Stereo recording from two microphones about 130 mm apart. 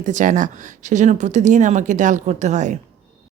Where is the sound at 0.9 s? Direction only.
65° right (ahead or behind).